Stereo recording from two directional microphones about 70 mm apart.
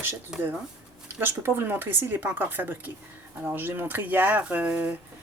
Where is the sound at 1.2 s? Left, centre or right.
Right.